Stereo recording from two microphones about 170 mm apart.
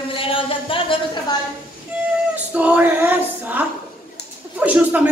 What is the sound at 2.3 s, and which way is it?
A woman's voice, 10° right (ahead or behind).